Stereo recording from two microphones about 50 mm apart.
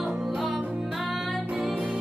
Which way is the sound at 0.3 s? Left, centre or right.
Centre.